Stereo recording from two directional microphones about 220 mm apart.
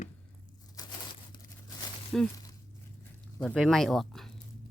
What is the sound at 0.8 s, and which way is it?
Crumpling, 15° left (ahead or behind).